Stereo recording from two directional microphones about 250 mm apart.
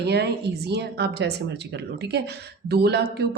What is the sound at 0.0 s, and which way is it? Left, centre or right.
Speech, right.